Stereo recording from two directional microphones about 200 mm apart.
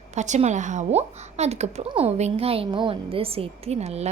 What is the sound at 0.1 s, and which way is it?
A woman's voice, 35° right (ahead or behind).